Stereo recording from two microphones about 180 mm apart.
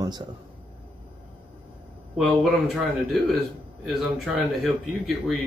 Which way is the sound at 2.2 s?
Centre (ahead or behind).